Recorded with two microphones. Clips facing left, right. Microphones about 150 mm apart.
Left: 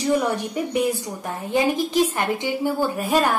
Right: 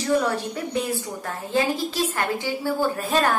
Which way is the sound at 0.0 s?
15° left (ahead or behind).